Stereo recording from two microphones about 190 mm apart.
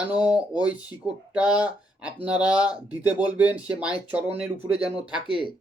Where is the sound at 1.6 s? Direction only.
5° right (ahead or behind).